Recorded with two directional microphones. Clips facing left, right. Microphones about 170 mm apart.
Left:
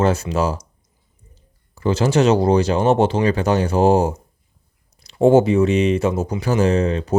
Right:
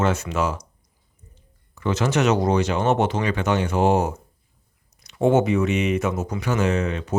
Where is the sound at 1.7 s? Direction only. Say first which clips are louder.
Left 4 dB; 30° left (ahead or behind).